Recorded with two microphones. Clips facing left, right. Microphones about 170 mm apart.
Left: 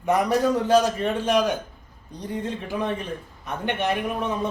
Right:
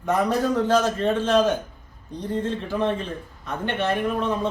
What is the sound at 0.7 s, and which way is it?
A man's voice, 15° left (ahead or behind).